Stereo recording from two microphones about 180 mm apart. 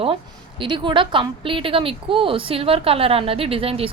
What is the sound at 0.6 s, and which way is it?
A woman's voice, 25° right (ahead or behind).